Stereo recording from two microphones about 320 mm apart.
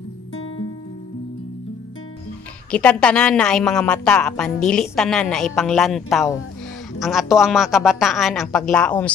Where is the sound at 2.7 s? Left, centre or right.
Centre.